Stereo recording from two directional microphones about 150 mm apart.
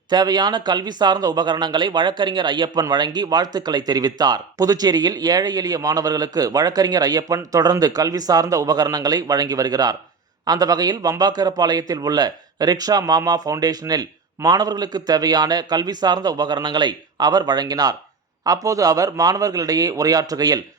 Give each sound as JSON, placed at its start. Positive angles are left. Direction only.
{"t": 0.1, "sound": "speech", "side_deg": -30}